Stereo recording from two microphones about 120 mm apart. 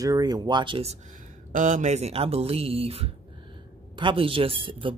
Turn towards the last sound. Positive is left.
turn(degrees=-45)  # may be behind; listen again after turning